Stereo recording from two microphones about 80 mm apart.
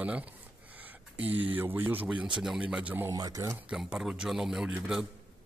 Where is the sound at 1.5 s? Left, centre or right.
Right.